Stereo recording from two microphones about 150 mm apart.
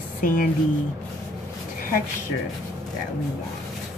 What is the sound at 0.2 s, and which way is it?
Speech, 65° left (ahead or behind).